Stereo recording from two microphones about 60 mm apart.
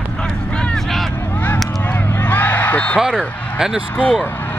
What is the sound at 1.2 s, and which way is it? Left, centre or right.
Honk, left.